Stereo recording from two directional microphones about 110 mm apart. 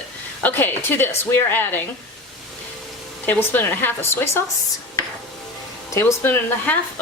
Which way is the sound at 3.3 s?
20° left (ahead or behind).